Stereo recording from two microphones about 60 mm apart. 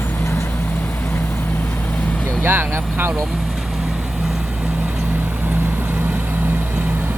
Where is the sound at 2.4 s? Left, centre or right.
Right.